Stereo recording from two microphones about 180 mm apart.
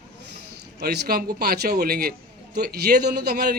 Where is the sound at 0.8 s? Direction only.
60° right (ahead or behind).